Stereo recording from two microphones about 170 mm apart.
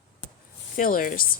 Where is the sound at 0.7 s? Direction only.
55° left (ahead or behind).